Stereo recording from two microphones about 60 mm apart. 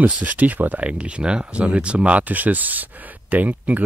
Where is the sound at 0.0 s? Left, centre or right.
Right.